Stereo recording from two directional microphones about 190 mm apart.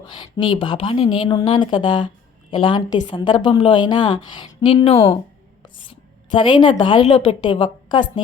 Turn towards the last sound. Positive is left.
turn(degrees=25)  # may be behind; listen again after turning